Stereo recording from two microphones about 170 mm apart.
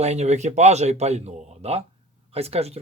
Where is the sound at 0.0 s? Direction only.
40° right (ahead or behind).